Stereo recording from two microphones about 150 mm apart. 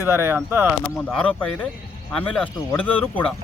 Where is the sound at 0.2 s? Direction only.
15° right (ahead or behind).